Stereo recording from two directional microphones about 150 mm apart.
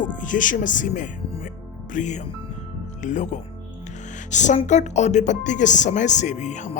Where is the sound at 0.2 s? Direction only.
60° left (ahead or behind).